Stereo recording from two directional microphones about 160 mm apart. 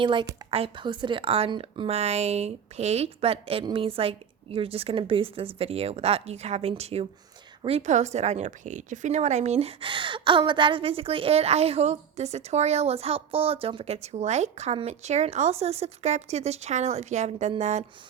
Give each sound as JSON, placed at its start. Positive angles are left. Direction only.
{"t": 0.0, "sound": "a woman's voice", "side_deg": -30}